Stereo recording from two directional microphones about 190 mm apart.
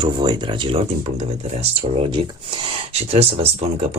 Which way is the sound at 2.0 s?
25° right (ahead or behind).